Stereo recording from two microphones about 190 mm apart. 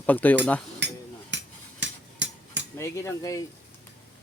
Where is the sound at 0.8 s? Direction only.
65° right (ahead or behind).